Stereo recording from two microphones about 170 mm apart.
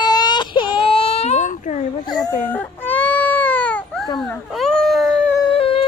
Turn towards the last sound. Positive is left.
turn(degrees=35)  # may be behind; listen again after turning